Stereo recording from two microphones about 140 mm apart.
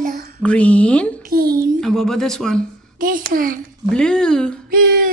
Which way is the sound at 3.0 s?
80° right.